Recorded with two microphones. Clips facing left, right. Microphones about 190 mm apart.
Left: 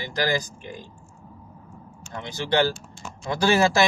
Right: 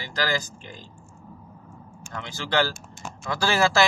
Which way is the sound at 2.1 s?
20° left (ahead or behind).